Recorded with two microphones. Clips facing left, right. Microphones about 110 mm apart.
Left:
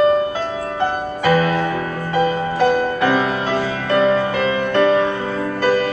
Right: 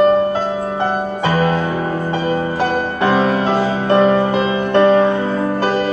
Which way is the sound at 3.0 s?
25° right (ahead or behind).